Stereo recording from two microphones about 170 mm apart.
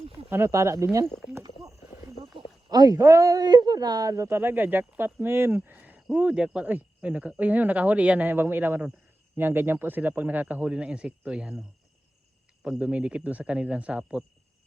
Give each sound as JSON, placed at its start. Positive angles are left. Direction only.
{"t": 0.3, "sound": "a man's voice", "side_deg": -15}
{"t": 1.0, "sound": "speech", "side_deg": 0}
{"t": 1.3, "sound": "a sound", "side_deg": -15}
{"t": 2.0, "sound": "a man's voice", "side_deg": -20}
{"t": 12.6, "sound": "a man's voice", "side_deg": -5}